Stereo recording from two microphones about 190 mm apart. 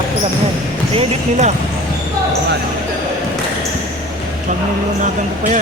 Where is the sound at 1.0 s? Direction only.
35° right (ahead or behind).